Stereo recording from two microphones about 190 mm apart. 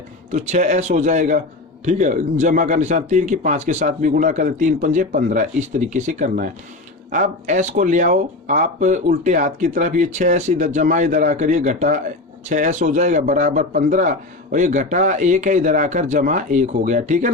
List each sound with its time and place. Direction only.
0.3 s speech: 40° right (ahead or behind)